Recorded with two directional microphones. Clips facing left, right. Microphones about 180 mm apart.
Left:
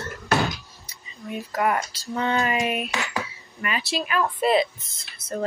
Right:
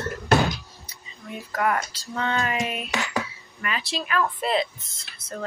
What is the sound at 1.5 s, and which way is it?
Speech, 15° left (ahead or behind).